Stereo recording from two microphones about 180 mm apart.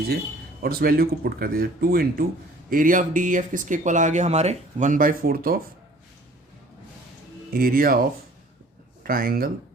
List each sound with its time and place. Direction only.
0.6 s speech: 55° right (ahead or behind)
7.5 s speech: 55° right (ahead or behind)
9.0 s speech: 55° right (ahead or behind)